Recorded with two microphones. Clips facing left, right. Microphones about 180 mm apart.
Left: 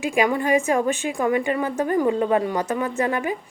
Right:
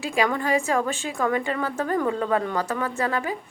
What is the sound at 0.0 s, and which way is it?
A woman's voice, 15° left (ahead or behind).